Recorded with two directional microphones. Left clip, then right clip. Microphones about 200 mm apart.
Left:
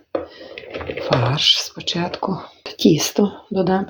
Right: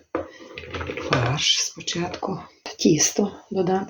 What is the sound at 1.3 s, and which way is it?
Speech, 30° left (ahead or behind).